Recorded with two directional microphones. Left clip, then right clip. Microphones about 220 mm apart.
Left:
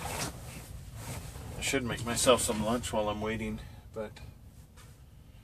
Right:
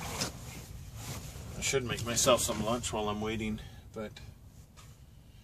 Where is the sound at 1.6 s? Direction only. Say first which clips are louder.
Even; 5° right (ahead or behind).